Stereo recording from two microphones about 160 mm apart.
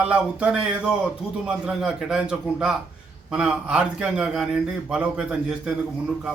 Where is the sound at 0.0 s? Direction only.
5° right (ahead or behind).